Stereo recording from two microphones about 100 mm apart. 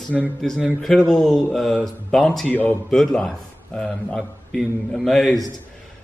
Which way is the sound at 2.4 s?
15° left (ahead or behind).